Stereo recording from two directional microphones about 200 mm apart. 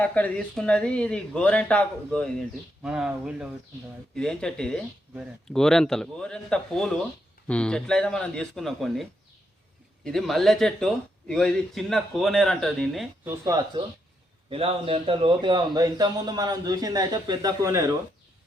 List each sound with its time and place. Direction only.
0.0 s speech: 5° left (ahead or behind)
13.4 s speech: 20° right (ahead or behind)